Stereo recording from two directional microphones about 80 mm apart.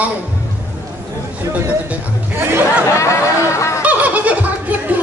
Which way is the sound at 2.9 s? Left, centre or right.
Left.